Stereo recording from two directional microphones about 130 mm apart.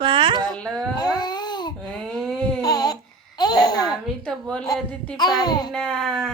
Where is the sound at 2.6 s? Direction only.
30° left (ahead or behind).